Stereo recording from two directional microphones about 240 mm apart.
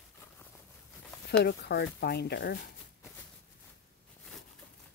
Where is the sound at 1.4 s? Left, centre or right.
Left.